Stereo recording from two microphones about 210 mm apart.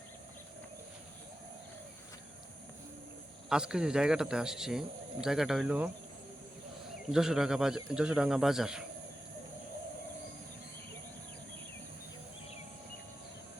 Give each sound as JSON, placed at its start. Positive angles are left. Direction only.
{"t": 3.5, "sound": "speech", "side_deg": -5}
{"t": 7.1, "sound": "speech", "side_deg": 0}